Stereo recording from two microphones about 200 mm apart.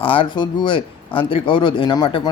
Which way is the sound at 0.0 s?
25° left (ahead or behind).